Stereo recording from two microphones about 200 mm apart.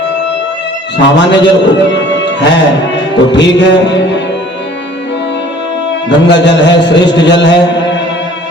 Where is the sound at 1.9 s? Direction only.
60° left (ahead or behind).